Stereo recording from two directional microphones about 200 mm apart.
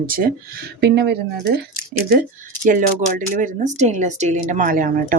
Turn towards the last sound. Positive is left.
turn(degrees=-45)  # may be behind; listen again after turning